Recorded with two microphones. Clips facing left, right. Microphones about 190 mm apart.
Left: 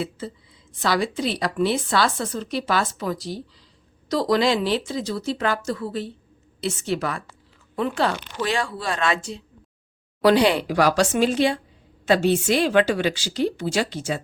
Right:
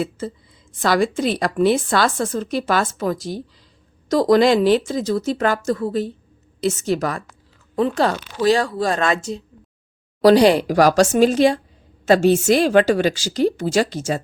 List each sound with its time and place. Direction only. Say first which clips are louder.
0.2 s a woman's voice: right 5 dB; 45° right (ahead or behind)